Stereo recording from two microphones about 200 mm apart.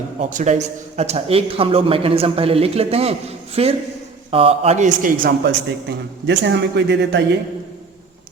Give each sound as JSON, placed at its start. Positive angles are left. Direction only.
{"t": 0.2, "sound": "a man's voice", "side_deg": -35}
{"t": 6.2, "sound": "speech", "side_deg": -60}